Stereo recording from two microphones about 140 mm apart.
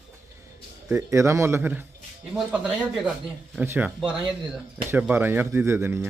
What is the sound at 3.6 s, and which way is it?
Speech, 15° right (ahead or behind).